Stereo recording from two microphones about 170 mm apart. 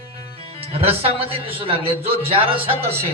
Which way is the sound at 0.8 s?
35° right (ahead or behind).